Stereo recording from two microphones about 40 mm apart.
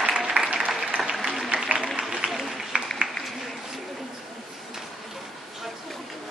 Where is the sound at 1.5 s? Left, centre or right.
Right.